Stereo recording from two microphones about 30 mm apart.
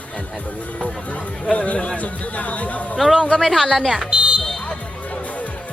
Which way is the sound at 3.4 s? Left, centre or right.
Centre.